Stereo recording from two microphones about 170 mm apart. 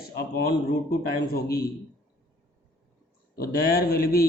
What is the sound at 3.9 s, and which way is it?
Speech, 65° left (ahead or behind).